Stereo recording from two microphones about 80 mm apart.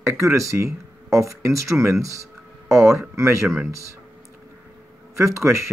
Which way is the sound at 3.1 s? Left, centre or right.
Right.